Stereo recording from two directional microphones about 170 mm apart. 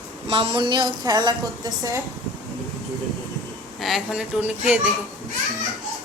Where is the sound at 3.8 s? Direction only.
Centre (ahead or behind).